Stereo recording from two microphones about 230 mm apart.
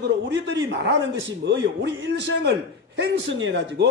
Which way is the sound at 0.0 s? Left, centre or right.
Right.